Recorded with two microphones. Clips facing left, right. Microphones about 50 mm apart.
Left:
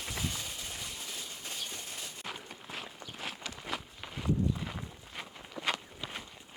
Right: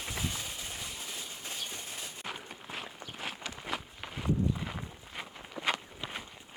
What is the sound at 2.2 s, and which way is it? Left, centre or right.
Walk, right.